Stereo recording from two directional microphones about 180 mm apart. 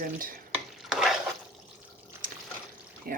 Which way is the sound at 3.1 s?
55° right (ahead or behind).